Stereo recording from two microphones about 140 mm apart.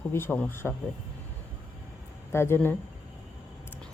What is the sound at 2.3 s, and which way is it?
Speech, 15° left (ahead or behind).